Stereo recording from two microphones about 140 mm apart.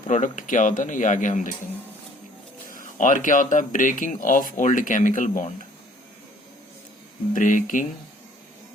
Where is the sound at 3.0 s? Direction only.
70° left (ahead or behind).